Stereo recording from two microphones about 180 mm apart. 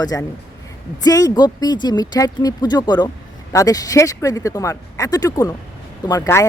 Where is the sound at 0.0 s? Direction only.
20° left (ahead or behind).